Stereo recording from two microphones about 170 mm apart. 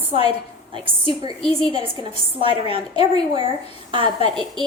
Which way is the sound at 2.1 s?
35° left (ahead or behind).